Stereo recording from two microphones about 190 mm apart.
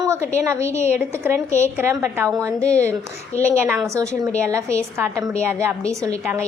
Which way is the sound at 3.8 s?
15° right (ahead or behind).